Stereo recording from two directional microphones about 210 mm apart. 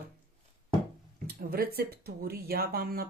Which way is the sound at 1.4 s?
45° right (ahead or behind).